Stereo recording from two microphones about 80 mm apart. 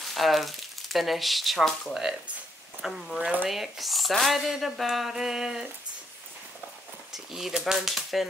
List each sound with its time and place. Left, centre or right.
0.0 s speech: centre
3.2 s speech: centre
3.4 s speech: centre
7.1 s speech: centre